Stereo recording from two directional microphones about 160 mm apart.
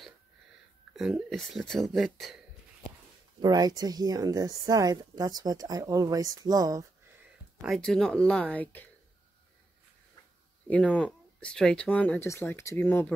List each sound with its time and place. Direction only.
0.9 s speech: centre (ahead or behind)
3.3 s a woman's voice: 25° right (ahead or behind)
7.6 s speech: centre (ahead or behind)
10.7 s speech: 10° left (ahead or behind)